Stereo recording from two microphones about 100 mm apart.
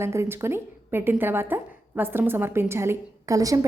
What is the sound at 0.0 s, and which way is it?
A woman's voice, 25° right (ahead or behind).